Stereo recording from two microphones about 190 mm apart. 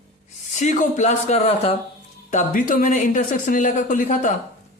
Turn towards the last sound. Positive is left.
turn(degrees=45)  # may be behind; listen again after turning